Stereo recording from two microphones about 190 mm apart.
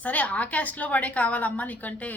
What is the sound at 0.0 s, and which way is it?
A woman's voice, 10° left (ahead or behind).